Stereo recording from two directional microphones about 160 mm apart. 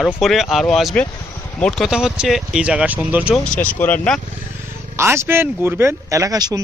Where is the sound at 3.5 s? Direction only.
10° left (ahead or behind).